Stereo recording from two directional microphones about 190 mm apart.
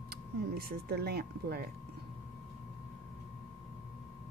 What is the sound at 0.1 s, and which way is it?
Speech, 55° right (ahead or behind).